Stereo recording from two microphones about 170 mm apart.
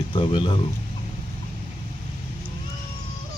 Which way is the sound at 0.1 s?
30° left (ahead or behind).